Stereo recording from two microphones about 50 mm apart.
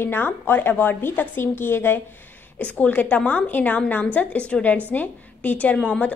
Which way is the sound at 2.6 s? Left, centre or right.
Left.